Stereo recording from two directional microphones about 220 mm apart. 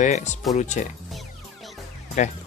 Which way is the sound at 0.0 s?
30° left (ahead or behind).